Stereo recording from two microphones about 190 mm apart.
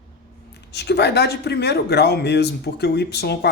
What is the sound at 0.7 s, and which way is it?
Speech, 60° left (ahead or behind).